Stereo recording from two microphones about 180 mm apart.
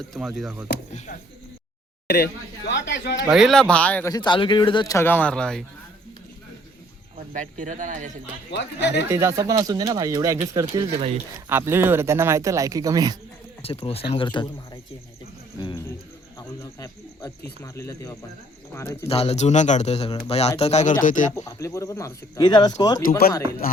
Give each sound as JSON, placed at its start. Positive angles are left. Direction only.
{"t": 0.1, "sound": "speech", "side_deg": 0}
{"t": 2.0, "sound": "speech", "side_deg": 65}
{"t": 3.2, "sound": "speech", "side_deg": 0}
{"t": 4.1, "sound": "speech", "side_deg": 25}
{"t": 7.3, "sound": "speech", "side_deg": -45}
{"t": 8.5, "sound": "speech", "side_deg": 75}
{"t": 9.0, "sound": "speech", "side_deg": -15}
{"t": 13.6, "sound": "speech", "side_deg": 35}
{"t": 16.8, "sound": "speech", "side_deg": 20}
{"t": 19.0, "sound": "a man's voice", "side_deg": 35}
{"t": 21.3, "sound": "speech", "side_deg": 15}
{"t": 23.0, "sound": "speech", "side_deg": 55}